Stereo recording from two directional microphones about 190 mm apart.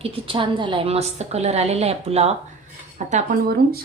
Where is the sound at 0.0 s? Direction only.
30° right (ahead or behind).